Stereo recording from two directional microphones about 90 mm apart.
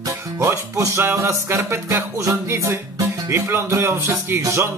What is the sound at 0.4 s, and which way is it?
Music, 35° right (ahead or behind).